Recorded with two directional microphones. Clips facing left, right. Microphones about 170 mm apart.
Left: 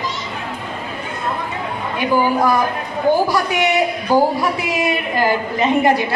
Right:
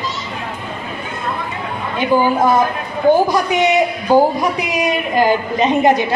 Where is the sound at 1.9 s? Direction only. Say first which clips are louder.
Right 2 dB; 20° right (ahead or behind).